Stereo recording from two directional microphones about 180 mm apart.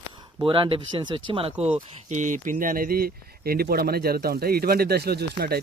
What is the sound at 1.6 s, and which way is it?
Speech, 40° right (ahead or behind).